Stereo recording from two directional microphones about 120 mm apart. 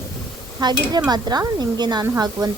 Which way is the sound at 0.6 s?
35° right (ahead or behind).